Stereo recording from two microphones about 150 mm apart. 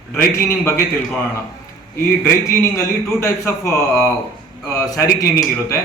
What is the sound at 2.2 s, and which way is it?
A man's voice, 15° left (ahead or behind).